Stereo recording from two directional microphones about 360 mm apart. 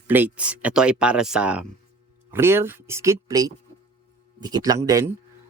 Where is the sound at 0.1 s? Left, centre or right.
Centre.